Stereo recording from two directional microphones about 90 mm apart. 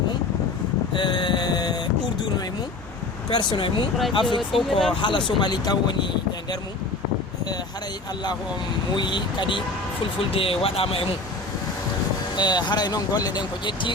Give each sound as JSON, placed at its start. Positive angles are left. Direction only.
{"t": 0.9, "sound": "a sound", "side_deg": 60}
{"t": 3.2, "sound": "speech", "side_deg": 65}
{"t": 4.5, "sound": "speech", "side_deg": 5}
{"t": 5.0, "sound": "speech", "side_deg": 60}
{"t": 9.0, "sound": "speech", "side_deg": 60}
{"t": 10.3, "sound": "speech", "side_deg": 90}
{"t": 12.4, "sound": "speech", "side_deg": 50}